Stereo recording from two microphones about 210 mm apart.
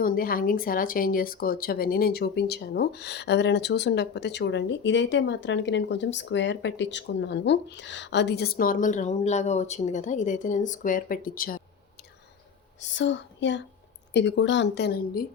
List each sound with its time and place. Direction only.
0.0 s speech: 45° left (ahead or behind)
12.8 s speech: 60° left (ahead or behind)